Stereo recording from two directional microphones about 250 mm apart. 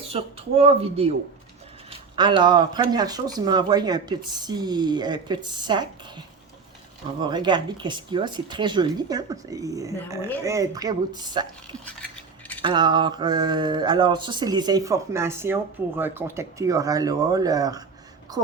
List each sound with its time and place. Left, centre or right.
0.1 s speech: right
12.6 s speech: centre